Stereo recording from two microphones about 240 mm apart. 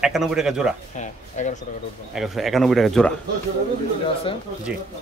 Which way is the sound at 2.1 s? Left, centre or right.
Centre.